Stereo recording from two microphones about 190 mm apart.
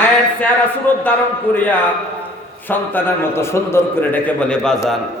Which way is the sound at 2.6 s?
10° left (ahead or behind).